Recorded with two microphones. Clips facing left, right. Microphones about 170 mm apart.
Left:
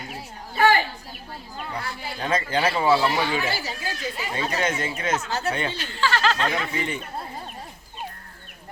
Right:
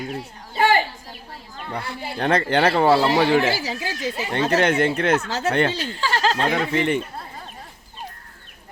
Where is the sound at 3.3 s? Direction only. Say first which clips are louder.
Right 8 dB; 80° right.